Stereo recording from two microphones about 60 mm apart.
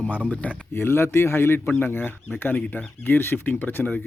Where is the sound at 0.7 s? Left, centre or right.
Left.